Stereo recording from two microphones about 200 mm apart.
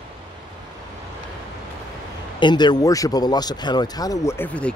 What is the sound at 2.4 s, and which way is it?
Speech, 20° left (ahead or behind).